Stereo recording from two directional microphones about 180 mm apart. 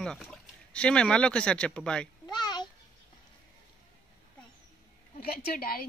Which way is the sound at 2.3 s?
25° left (ahead or behind).